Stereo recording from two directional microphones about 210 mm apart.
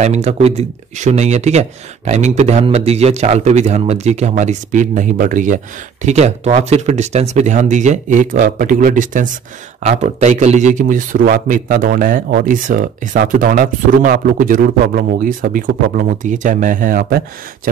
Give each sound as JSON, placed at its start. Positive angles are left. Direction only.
{"t": 0.0, "sound": "a man's voice", "side_deg": -30}